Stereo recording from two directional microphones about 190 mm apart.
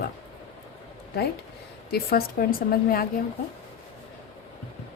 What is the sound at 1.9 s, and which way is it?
A woman's voice, 55° left (ahead or behind).